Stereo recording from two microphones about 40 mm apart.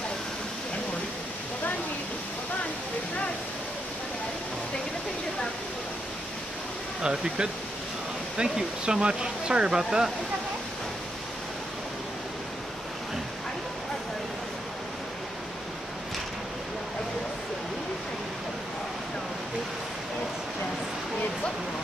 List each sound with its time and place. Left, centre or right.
7.0 s speech: centre